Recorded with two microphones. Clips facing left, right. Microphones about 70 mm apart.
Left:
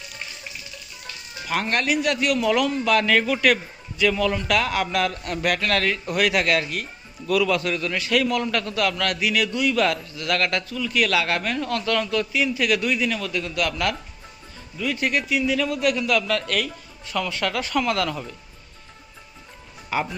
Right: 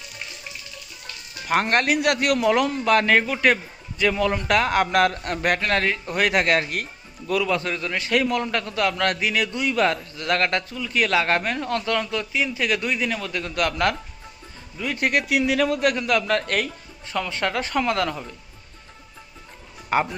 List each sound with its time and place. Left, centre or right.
1.6 s a man's voice: right
5.5 s a man's voice: right
7.3 s a man's voice: right
15.3 s a man's voice: right
19.9 s speech: right